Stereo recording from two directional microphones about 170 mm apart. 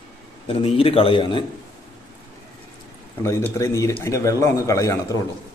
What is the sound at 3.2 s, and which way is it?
Speech, 15° left (ahead or behind).